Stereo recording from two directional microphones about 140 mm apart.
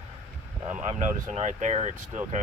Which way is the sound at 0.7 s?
60° right (ahead or behind).